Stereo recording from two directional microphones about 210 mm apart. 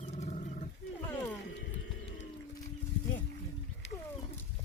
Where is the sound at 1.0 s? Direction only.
10° left (ahead or behind).